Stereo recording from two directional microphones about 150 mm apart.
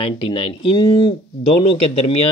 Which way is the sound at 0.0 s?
35° left (ahead or behind).